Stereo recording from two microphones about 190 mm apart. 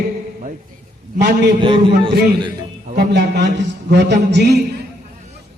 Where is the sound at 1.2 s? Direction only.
60° right (ahead or behind).